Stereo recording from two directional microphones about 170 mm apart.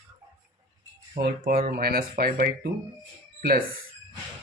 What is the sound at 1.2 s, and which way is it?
Speech, 65° right (ahead or behind).